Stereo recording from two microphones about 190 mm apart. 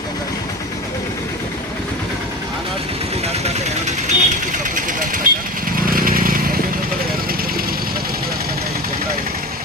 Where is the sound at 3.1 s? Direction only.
35° right (ahead or behind); by 8.5 s 50° right (ahead or behind).